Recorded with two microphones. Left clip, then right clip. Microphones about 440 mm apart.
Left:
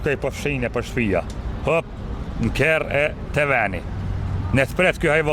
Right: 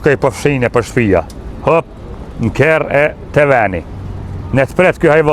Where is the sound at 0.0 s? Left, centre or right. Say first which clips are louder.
Right 11 dB; right.